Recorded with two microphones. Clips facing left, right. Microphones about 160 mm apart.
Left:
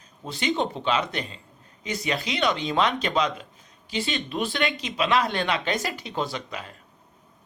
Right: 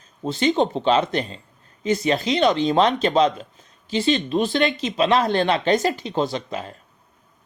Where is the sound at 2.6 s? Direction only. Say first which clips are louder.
Right 6 dB; 40° right (ahead or behind).